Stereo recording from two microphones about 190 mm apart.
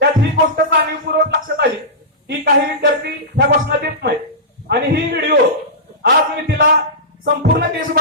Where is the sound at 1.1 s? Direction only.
55° right (ahead or behind).